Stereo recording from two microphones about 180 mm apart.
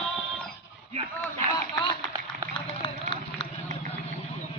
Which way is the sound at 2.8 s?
25° left (ahead or behind).